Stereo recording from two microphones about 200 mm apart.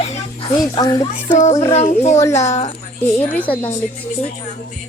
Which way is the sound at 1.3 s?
35° left (ahead or behind).